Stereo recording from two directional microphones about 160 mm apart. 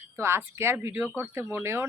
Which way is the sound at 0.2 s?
15° right (ahead or behind).